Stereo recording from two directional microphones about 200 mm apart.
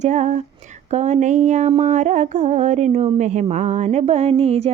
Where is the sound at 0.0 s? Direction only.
35° right (ahead or behind).